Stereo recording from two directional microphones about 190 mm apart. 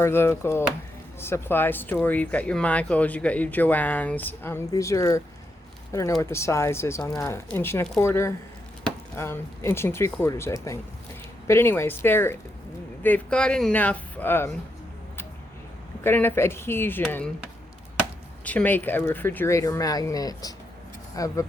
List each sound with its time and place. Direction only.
0.0 s speech: 15° left (ahead or behind)
16.0 s speech: 10° left (ahead or behind)
18.4 s speech: 10° left (ahead or behind)